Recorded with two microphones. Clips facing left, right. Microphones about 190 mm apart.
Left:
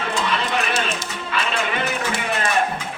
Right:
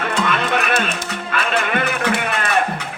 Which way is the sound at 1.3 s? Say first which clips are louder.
Right 3 dB; 60° right (ahead or behind).